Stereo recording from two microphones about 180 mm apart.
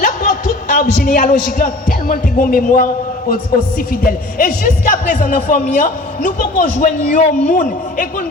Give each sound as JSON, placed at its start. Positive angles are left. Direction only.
{"t": 0.0, "sound": "a man's voice", "side_deg": 45}